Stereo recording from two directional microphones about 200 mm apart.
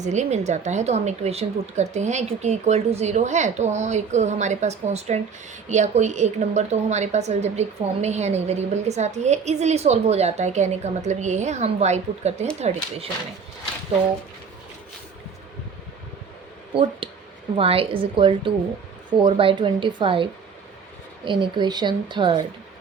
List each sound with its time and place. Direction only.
0.0 s a woman's voice: 35° right (ahead or behind)
17.0 s a sound: 25° right (ahead or behind)
17.6 s speech: 30° right (ahead or behind)
21.2 s speech: 25° right (ahead or behind)